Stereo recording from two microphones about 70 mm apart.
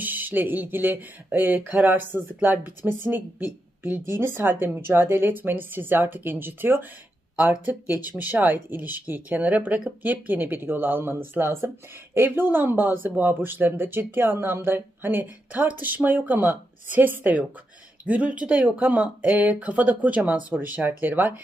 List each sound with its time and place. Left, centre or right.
0.0 s speech: right